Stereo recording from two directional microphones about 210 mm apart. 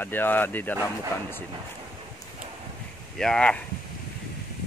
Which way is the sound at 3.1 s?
5° left (ahead or behind).